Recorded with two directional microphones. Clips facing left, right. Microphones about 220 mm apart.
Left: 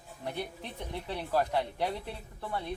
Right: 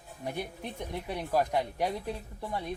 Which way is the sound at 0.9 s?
15° right (ahead or behind).